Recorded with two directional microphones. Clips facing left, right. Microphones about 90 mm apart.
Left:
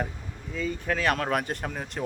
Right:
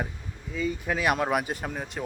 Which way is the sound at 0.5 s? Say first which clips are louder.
Even; 5° right (ahead or behind).